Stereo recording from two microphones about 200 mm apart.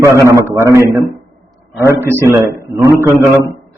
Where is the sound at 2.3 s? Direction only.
15° right (ahead or behind).